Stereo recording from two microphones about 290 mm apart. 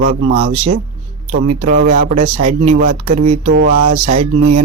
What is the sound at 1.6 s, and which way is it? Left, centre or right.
A man's voice, right.